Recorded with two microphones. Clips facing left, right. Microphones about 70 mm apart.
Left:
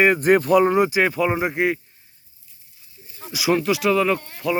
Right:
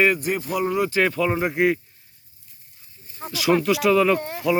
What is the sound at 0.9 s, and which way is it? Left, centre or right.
Speech, centre.